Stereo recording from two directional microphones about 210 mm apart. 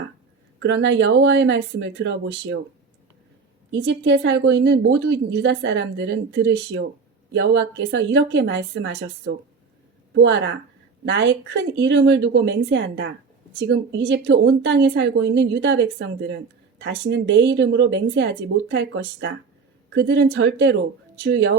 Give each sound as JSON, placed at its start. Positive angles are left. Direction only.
{"t": 0.6, "sound": "a woman's voice", "side_deg": -55}
{"t": 3.7, "sound": "a woman's voice", "side_deg": -60}
{"t": 11.0, "sound": "a woman's voice", "side_deg": -60}